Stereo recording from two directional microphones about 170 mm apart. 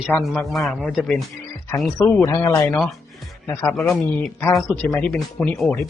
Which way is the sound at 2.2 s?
20° left (ahead or behind).